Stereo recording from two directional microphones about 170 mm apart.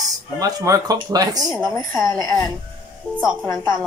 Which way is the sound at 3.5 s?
10° left (ahead or behind).